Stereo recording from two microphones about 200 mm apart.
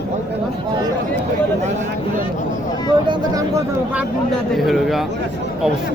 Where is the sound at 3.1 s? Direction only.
15° right (ahead or behind).